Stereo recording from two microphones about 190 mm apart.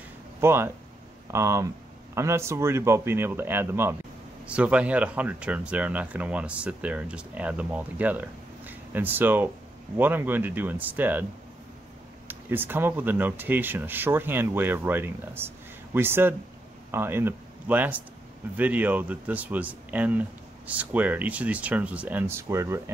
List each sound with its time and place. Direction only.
0.4 s speech: 15° right (ahead or behind)
12.3 s speech: 10° right (ahead or behind)